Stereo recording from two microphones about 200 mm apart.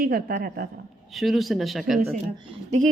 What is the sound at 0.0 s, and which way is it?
Speech, 50° right (ahead or behind).